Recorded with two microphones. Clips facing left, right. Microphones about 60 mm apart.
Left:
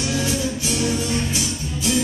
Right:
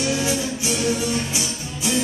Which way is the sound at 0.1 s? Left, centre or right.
Centre.